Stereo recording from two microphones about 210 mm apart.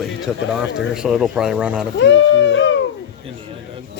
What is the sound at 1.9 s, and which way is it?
Speech, 60° left (ahead or behind).